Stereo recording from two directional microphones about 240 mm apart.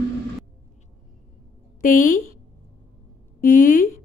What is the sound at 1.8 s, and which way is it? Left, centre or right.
Speech, left.